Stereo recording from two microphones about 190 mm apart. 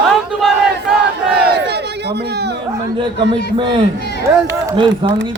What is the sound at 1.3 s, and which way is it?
Crowd, 60° right (ahead or behind).